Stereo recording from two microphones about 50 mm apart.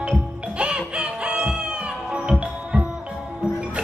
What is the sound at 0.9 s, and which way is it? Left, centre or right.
Music, centre.